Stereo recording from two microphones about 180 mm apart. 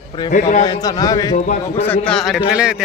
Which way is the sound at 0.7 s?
20° left (ahead or behind).